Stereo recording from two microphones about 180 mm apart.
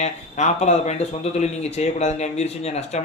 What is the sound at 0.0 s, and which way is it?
A man's voice, 40° left (ahead or behind).